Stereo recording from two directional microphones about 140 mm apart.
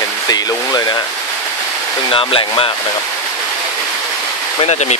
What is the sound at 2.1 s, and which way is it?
Speech, 40° left (ahead or behind).